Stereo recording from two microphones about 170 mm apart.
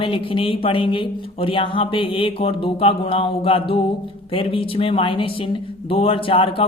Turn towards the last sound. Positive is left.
turn(degrees=30)  # may be behind; listen again after turning